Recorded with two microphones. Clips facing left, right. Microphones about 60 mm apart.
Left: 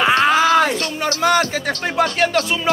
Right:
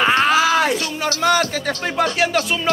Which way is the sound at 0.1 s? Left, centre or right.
Left.